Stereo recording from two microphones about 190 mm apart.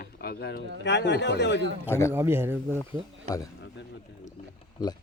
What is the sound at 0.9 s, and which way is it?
Speech, 65° left (ahead or behind).